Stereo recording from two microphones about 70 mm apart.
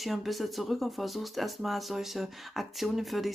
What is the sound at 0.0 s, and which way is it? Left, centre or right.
Speech, centre.